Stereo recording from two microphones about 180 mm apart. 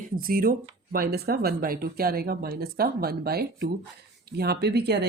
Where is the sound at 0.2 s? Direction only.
55° right (ahead or behind).